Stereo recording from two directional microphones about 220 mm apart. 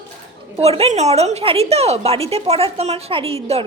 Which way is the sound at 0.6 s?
30° right (ahead or behind).